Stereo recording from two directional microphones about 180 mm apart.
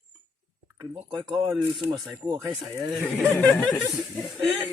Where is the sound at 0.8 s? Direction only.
20° right (ahead or behind).